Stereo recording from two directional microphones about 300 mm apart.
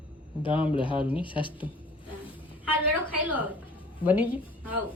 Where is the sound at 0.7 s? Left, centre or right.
Centre.